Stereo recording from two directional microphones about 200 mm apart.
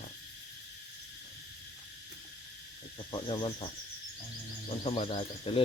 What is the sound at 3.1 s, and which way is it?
Speech, 25° left (ahead or behind).